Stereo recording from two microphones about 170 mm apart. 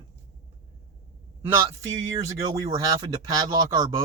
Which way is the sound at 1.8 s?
20° right (ahead or behind).